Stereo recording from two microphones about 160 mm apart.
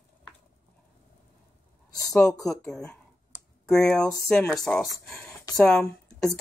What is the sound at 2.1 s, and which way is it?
Speech, 5° left (ahead or behind).